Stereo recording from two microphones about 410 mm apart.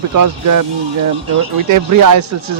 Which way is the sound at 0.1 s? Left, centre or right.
Right.